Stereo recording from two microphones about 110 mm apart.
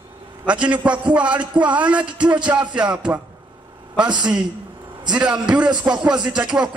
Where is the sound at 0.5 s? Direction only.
10° right (ahead or behind).